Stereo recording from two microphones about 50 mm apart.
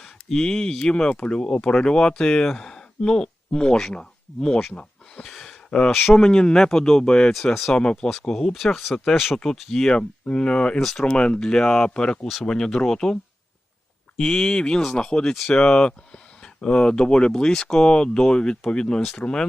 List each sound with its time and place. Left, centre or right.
0.0 s speech: centre
5.3 s a sound: centre
6.1 s speech: centre
8.5 s speech: centre
10.8 s speech: centre
11.0 s speech: centre
14.2 s speech: centre